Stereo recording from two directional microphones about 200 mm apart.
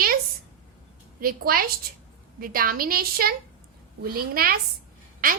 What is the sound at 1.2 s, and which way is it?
A woman's voice, 45° right (ahead or behind).